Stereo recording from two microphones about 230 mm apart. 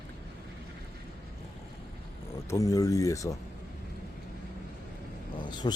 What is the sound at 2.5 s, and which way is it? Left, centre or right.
Speech, centre.